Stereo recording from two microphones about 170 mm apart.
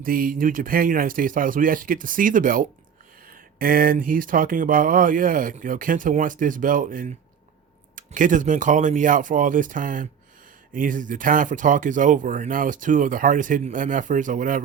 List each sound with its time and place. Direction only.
0.0 s speech: 55° right (ahead or behind)